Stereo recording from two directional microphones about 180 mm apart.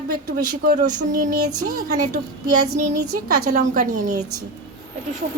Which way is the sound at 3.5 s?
40° right (ahead or behind).